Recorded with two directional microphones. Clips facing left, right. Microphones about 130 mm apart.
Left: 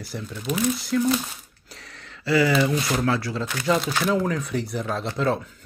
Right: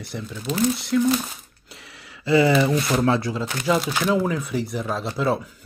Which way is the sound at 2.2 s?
20° right (ahead or behind).